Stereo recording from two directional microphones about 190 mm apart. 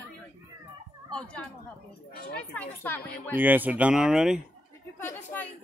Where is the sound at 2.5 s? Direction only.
10° left (ahead or behind).